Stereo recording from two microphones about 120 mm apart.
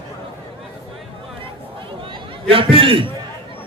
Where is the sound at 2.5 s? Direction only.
50° right (ahead or behind).